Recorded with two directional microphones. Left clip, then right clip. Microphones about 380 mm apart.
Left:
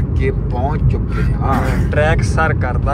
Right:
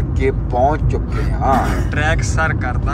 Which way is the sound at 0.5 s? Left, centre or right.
Right.